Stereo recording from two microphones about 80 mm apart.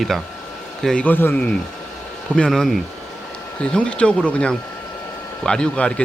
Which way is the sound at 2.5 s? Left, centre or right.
Centre.